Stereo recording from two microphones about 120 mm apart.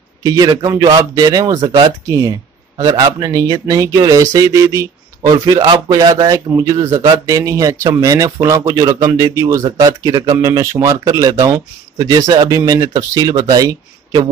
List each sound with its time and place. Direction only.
0.2 s a man's voice: 30° right (ahead or behind)
9.7 s speech: 35° right (ahead or behind)